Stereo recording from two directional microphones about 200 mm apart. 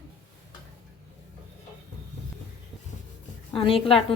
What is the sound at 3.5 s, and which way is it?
Speech, 25° left (ahead or behind).